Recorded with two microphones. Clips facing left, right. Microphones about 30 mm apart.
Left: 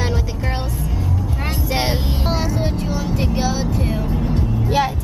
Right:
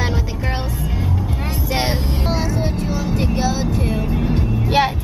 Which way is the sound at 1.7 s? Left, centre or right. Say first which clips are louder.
Right 1 dB; centre.